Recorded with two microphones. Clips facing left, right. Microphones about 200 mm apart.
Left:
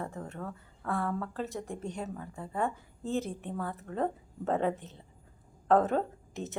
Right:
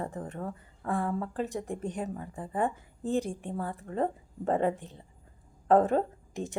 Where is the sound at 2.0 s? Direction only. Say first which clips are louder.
Right 3 dB; 15° right (ahead or behind).